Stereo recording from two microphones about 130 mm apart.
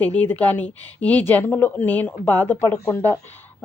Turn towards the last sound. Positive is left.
turn(degrees=20)  # may be behind; listen again after turning